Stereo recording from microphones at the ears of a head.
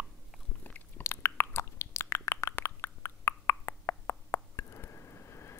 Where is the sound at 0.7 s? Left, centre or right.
Left.